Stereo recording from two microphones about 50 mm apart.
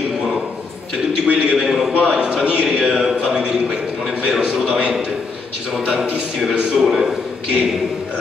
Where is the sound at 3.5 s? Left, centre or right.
Centre.